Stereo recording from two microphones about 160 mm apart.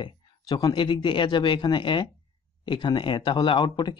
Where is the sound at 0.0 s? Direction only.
25° left (ahead or behind).